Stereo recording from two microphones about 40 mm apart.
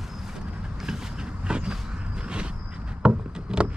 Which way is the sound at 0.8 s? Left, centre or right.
Centre.